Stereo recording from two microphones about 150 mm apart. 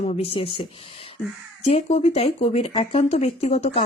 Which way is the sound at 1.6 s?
45° left (ahead or behind).